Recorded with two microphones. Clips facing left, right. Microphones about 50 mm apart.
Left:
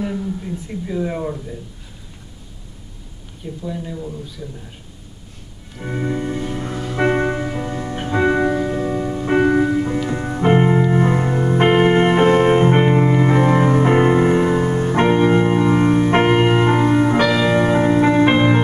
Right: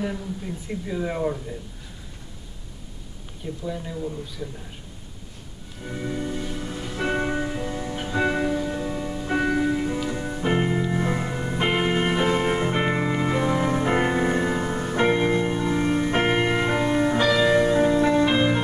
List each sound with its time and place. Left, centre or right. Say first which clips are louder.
0.7 s speech: left 4 dB; centre
3.6 s a man's voice: left 3 dB; centre
5.8 s music: left 7 dB; left
15.9 s music: left 7 dB; left